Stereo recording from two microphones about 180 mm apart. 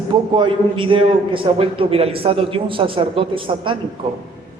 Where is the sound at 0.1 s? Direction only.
25° right (ahead or behind).